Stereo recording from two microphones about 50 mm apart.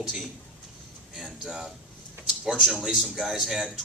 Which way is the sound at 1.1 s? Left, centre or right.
Centre.